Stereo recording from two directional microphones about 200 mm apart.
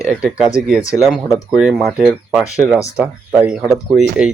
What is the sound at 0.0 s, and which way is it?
Speech, 5° right (ahead or behind).